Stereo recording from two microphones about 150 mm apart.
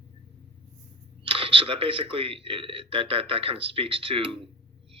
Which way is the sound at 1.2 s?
35° right (ahead or behind).